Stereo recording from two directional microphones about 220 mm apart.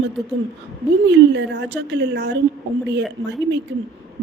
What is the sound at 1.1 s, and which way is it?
A woman's voice, 50° right (ahead or behind).